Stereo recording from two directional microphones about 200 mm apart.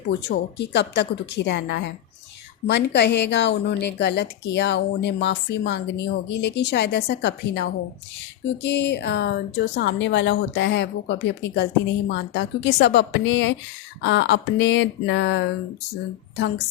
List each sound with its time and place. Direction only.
0.1 s a woman's voice: 60° left (ahead or behind)